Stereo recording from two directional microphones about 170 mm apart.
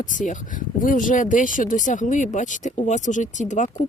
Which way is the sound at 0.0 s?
50° left (ahead or behind).